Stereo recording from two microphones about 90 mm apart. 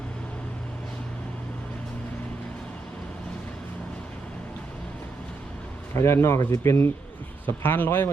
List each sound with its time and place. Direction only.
5.9 s speech: 30° left (ahead or behind)